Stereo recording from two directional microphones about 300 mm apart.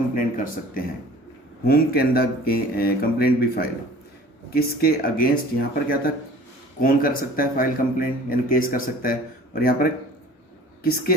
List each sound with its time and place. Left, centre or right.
0.1 s speech: left